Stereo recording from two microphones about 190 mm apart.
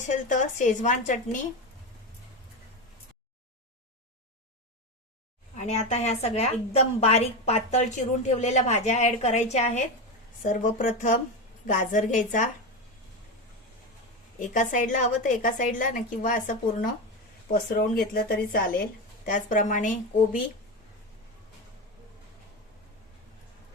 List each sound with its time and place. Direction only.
0.1 s a woman's voice: 40° left (ahead or behind)
5.6 s a woman's voice: 35° left (ahead or behind)
14.3 s a woman's voice: 45° left (ahead or behind)